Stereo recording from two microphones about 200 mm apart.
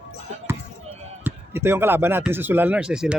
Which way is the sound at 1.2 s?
10° right (ahead or behind).